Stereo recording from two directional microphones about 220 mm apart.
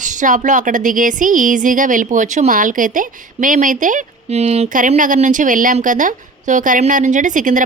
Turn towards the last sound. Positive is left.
turn(degrees=-35)  # may be behind; listen again after turning